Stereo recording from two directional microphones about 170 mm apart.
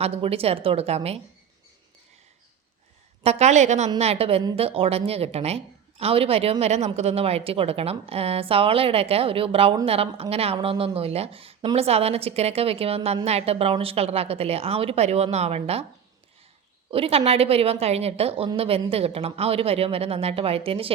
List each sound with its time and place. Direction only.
0.0 s a woman's voice: 35° right (ahead or behind)
3.2 s a woman's voice: 40° right (ahead or behind)
16.9 s a woman's voice: 35° right (ahead or behind)